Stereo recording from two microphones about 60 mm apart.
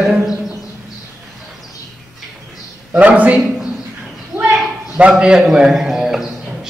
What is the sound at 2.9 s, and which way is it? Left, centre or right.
Speech, right.